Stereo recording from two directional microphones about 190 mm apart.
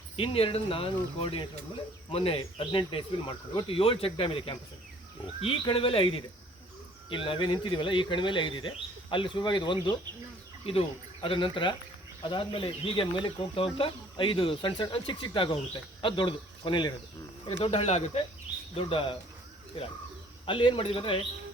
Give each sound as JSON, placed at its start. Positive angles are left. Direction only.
{"t": 0.2, "sound": "speech", "side_deg": 30}
{"t": 20.4, "sound": "speech", "side_deg": 25}